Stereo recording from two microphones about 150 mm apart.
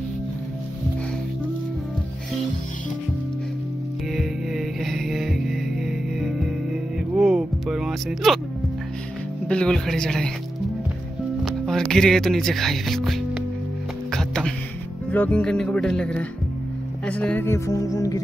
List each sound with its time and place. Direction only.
4.1 s music: centre (ahead or behind)
9.5 s speech: 5° left (ahead or behind)
11.4 s speech: centre (ahead or behind)
14.1 s music: 5° left (ahead or behind)
15.0 s speech: 10° left (ahead or behind)
17.0 s music: 10° left (ahead or behind)